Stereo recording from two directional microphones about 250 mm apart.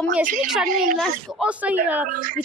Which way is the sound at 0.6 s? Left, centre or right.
Right.